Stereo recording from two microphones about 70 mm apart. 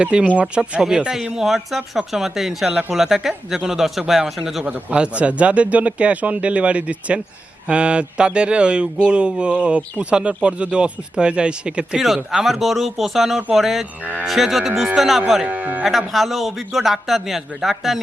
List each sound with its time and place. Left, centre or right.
0.0 s a man's voice: centre
4.6 s speech: right; by 13.8 s centre
14.0 s speech: right
14.3 s a man's voice: centre
15.4 s speech: right
15.8 s a man's voice: centre